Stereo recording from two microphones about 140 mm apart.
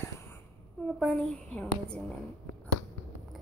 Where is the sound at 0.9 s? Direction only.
5° left (ahead or behind).